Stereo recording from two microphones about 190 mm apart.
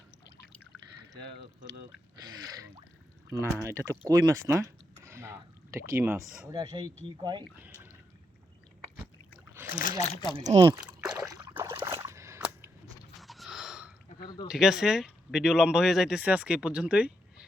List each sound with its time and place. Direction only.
2.1 s speech: 20° right (ahead or behind)
9.6 s speech: 45° left (ahead or behind)
10.0 s speech: 25° left (ahead or behind)
10.3 s speech: 25° right (ahead or behind)
10.8 s a sound: 5° right (ahead or behind)
11.3 s boat: 15° right (ahead or behind)
13.2 s sniff: centre (ahead or behind)
14.4 s speech: centre (ahead or behind)